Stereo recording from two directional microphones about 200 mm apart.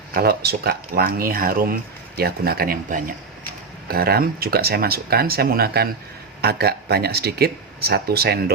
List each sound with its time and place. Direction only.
0.1 s speech: 50° right (ahead or behind)